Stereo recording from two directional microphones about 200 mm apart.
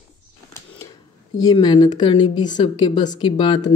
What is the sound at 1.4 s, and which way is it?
A woman's voice, 20° left (ahead or behind).